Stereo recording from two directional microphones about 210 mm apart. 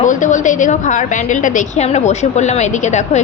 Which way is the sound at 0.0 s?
35° left (ahead or behind).